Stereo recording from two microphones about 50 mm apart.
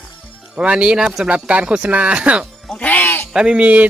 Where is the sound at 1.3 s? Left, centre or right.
Right.